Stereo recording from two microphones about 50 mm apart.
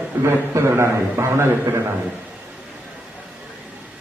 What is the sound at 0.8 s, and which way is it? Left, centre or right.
A man's voice, right.